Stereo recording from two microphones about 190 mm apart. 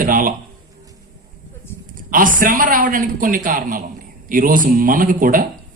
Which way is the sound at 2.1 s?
45° right (ahead or behind).